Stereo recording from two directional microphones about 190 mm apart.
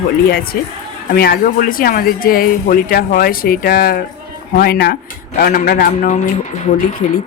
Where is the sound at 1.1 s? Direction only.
50° left (ahead or behind).